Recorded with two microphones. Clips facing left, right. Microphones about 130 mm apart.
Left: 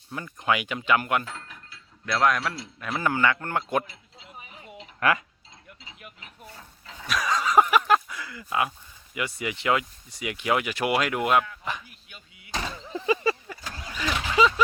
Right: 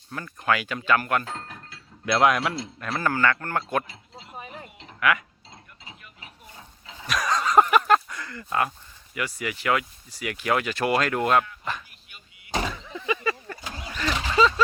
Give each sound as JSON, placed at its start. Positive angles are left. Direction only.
{"t": 0.1, "sound": "speech", "side_deg": 15}
{"t": 2.0, "sound": "speech", "side_deg": -10}
{"t": 2.8, "sound": "speech", "side_deg": 15}
{"t": 4.9, "sound": "speech", "side_deg": 35}
{"t": 6.6, "sound": "a sound", "side_deg": -10}
{"t": 7.1, "sound": "a sound", "side_deg": 0}
{"t": 9.1, "sound": "speech", "side_deg": 20}
{"t": 12.6, "sound": "a sound", "side_deg": 30}
{"t": 13.7, "sound": "vehicle", "side_deg": -10}
{"t": 13.9, "sound": "vehicle", "side_deg": 5}